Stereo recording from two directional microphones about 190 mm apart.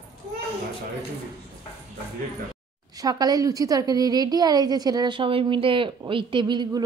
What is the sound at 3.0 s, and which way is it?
A woman's voice, 20° right (ahead or behind).